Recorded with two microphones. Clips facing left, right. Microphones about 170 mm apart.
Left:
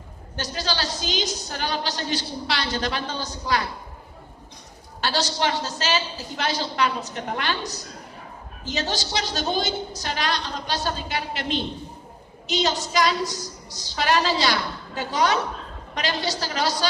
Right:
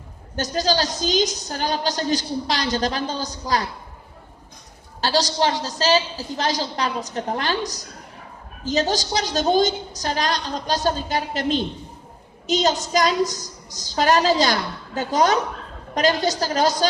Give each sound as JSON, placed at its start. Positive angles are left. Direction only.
{"t": 0.3, "sound": "a woman's voice", "side_deg": -45}
{"t": 4.9, "sound": "a man's voice", "side_deg": -35}
{"t": 8.6, "sound": "a woman's voice", "side_deg": -40}